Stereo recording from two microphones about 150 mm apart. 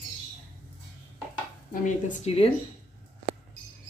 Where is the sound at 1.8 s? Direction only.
50° left (ahead or behind).